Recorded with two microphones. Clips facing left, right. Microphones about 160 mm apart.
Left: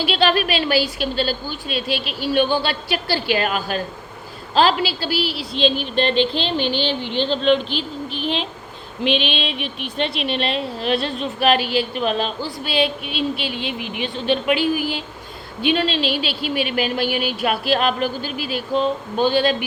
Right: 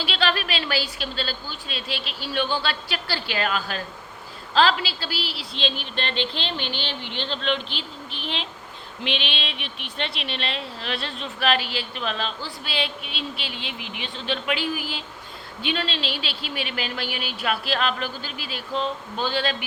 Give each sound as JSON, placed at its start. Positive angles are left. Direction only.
{"t": 0.0, "sound": "a woman's voice", "side_deg": 10}
{"t": 6.6, "sound": "speech", "side_deg": -20}
{"t": 7.3, "sound": "a woman's voice", "side_deg": 15}